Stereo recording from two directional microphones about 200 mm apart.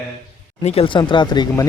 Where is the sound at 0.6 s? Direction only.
30° left (ahead or behind).